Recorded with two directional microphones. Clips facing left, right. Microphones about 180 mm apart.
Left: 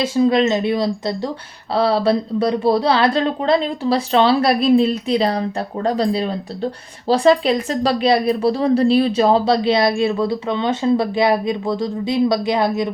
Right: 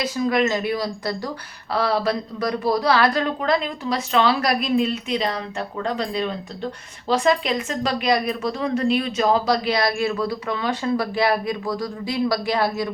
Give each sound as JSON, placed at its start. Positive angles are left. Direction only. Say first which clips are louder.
{"t": 0.0, "sound": "a woman's voice", "louder": "left 6 dB", "side_deg": 25}